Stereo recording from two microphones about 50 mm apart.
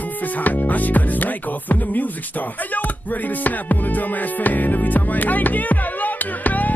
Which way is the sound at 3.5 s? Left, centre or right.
Left.